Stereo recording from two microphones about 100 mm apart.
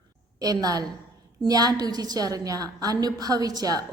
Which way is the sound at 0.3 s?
40° right (ahead or behind).